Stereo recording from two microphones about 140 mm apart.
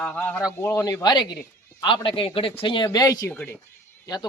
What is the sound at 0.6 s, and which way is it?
Speech, 25° left (ahead or behind).